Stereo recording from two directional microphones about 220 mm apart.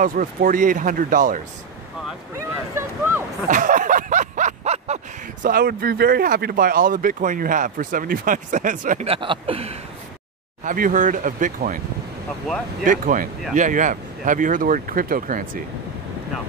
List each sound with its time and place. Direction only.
0.0 s speech: 40° right (ahead or behind)
2.3 s speech: 10° right (ahead or behind)
3.4 s a sound: 35° right (ahead or behind)
10.6 s speech: 35° right (ahead or behind)
12.8 s speech: 35° right (ahead or behind)